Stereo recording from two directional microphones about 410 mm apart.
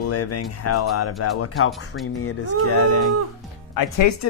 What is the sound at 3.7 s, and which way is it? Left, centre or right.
Speech, left.